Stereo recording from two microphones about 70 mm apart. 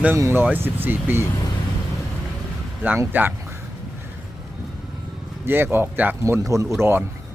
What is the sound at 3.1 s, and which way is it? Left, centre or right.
Speech, right.